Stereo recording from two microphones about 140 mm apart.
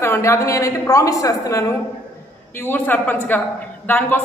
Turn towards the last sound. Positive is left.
turn(degrees=15)  # may be behind; listen again after turning